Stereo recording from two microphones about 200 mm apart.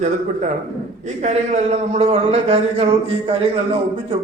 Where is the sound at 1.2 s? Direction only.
35° right (ahead or behind).